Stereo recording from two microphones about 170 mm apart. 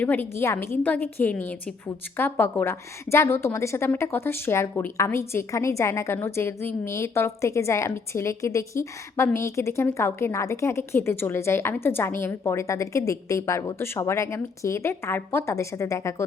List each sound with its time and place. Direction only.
0.0 s a woman's voice: 10° left (ahead or behind)